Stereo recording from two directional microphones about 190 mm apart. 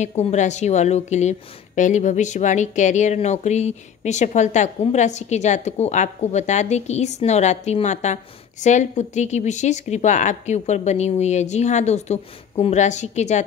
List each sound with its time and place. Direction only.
0.0 s speech: 35° left (ahead or behind)